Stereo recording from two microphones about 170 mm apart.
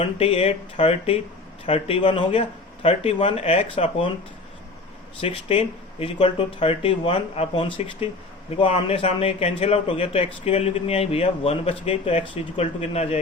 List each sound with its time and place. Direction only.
0.0 s speech: 35° left (ahead or behind)
5.2 s speech: 35° left (ahead or behind)